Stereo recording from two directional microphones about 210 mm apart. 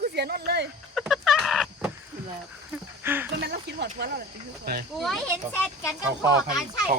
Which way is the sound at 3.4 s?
55° right (ahead or behind).